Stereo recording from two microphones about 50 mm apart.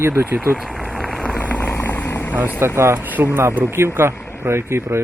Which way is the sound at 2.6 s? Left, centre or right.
Right.